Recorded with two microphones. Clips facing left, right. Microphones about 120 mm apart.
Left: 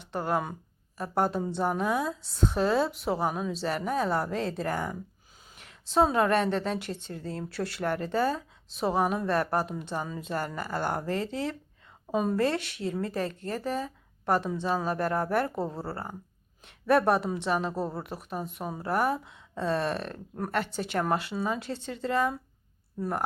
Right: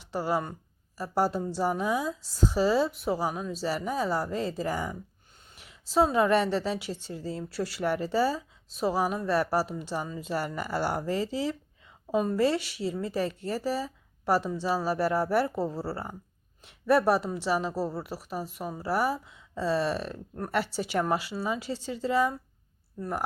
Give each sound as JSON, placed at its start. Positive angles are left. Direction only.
{"t": 0.1, "sound": "speech", "side_deg": -5}
{"t": 6.6, "sound": "speech", "side_deg": 50}
{"t": 7.5, "sound": "speech", "side_deg": -5}
{"t": 11.1, "sound": "speech", "side_deg": 55}
{"t": 12.1, "sound": "speech", "side_deg": 5}
{"t": 13.1, "sound": "speech", "side_deg": 45}
{"t": 13.5, "sound": "speech", "side_deg": -5}